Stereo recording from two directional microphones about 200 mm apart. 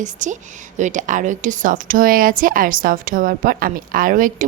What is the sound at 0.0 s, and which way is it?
A woman's voice, 40° right (ahead or behind).